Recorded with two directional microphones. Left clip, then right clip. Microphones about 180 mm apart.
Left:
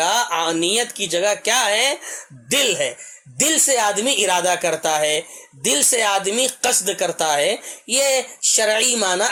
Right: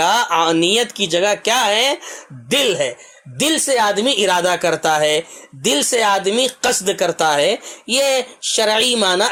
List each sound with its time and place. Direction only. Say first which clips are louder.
0.0 s speech: right 4 dB; 40° right (ahead or behind)